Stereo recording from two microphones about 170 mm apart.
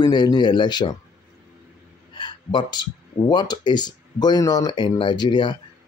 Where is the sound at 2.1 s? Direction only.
30° left (ahead or behind).